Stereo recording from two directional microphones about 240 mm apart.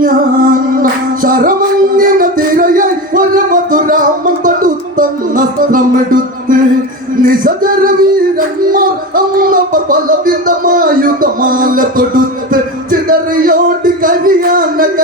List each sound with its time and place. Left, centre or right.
0.0 s music: right
7.2 s singing: right